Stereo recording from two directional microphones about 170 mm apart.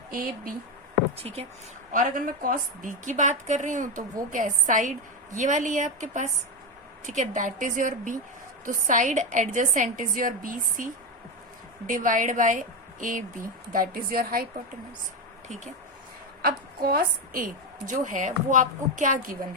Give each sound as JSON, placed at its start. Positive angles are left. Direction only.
{"t": 0.1, "sound": "a woman's voice", "side_deg": -55}
{"t": 1.9, "sound": "a woman's voice", "side_deg": -50}
{"t": 11.9, "sound": "a woman's voice", "side_deg": -50}
{"t": 16.4, "sound": "a woman's voice", "side_deg": -60}